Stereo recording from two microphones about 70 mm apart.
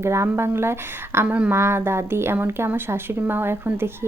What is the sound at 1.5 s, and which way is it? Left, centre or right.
Speech, right.